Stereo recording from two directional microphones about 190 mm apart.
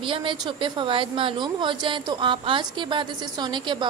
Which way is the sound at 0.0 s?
25° right (ahead or behind).